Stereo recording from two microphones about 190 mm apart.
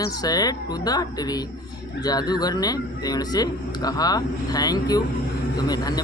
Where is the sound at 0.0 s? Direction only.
20° left (ahead or behind).